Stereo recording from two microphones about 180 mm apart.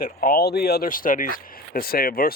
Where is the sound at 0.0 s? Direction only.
55° left (ahead or behind).